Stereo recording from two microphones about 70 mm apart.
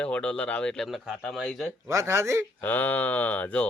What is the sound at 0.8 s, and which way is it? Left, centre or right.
Speech, centre.